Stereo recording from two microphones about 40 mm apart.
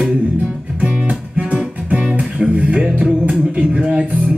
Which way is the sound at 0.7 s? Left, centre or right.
Right.